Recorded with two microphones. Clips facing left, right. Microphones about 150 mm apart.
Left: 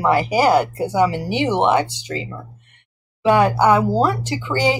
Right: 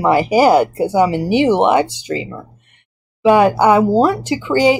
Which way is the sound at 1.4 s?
15° right (ahead or behind).